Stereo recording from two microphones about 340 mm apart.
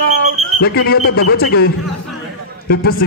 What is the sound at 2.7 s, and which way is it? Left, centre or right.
Speech, left.